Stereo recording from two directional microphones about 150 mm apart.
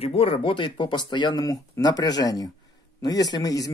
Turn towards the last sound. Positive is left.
turn(degrees=25)  # may be behind; listen again after turning